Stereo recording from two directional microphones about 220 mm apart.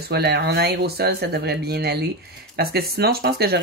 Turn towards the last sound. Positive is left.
turn(degrees=-45)  # may be behind; listen again after turning